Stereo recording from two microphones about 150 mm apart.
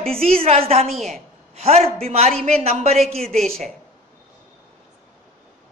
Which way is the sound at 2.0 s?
45° right (ahead or behind).